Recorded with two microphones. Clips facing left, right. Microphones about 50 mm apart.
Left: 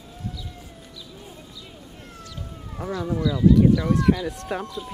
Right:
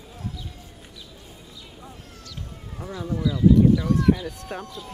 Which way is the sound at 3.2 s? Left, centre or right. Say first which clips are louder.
Even; centre.